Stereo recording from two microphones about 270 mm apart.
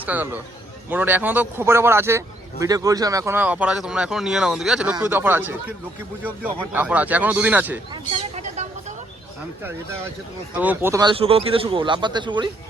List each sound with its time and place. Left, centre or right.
0.0 s a man's voice: centre
8.1 s a sound: right
10.5 s a man's voice: centre